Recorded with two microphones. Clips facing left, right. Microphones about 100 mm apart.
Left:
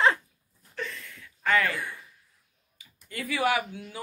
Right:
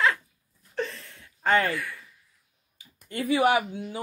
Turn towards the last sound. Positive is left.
turn(degrees=-25)  # may be behind; listen again after turning